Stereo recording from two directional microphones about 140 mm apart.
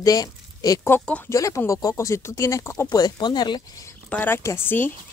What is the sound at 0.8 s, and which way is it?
Speech, 10° left (ahead or behind).